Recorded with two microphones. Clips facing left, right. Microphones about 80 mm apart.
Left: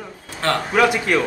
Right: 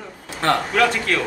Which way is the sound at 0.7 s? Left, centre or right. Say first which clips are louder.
Left 2 dB; centre.